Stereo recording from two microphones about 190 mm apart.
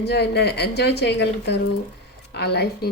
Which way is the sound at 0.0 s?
60° left (ahead or behind).